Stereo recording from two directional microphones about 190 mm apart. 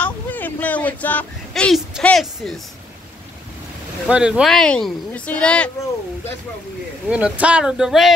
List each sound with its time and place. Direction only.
0.0 s speech: 10° left (ahead or behind)
4.1 s speech: 5° right (ahead or behind)
7.1 s speech: 5° right (ahead or behind)